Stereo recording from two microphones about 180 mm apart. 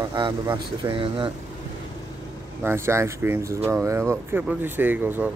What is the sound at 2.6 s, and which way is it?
Speech, 15° right (ahead or behind).